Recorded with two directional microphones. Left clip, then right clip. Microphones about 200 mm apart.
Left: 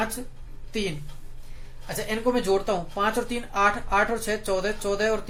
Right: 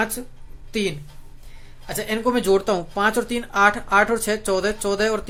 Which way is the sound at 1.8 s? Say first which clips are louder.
Right 3 dB; 40° right (ahead or behind).